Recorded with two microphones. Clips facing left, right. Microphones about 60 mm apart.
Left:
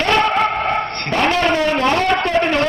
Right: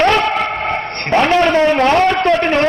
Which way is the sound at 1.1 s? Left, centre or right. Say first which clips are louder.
Right 5 dB; right.